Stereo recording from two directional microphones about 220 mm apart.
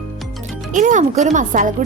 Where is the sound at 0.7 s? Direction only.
35° right (ahead or behind).